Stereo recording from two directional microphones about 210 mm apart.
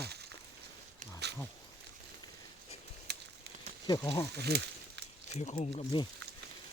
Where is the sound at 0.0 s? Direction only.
50° right (ahead or behind).